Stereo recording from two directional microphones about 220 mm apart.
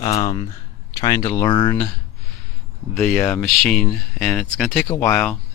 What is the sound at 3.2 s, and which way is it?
Speech, 5° left (ahead or behind).